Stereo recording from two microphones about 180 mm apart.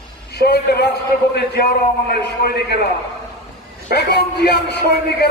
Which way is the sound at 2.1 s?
65° left (ahead or behind).